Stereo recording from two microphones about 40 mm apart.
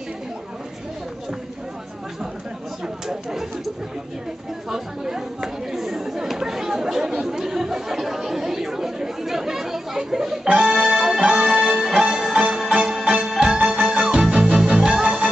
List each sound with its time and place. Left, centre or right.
3.1 s chatter: centre
4.6 s chatter: centre
13.3 s music: centre